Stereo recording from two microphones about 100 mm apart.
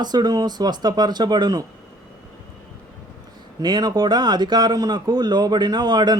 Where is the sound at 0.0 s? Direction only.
45° right (ahead or behind).